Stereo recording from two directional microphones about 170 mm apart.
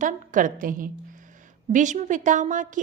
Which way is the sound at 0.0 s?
50° right (ahead or behind).